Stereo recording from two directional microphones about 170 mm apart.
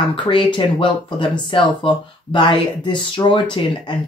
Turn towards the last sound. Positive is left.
turn(degrees=25)  # may be behind; listen again after turning